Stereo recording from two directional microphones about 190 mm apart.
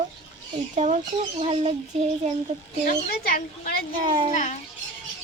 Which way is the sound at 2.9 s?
55° left (ahead or behind).